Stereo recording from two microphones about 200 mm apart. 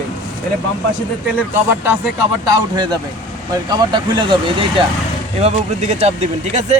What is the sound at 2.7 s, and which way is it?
Speech, 20° right (ahead or behind).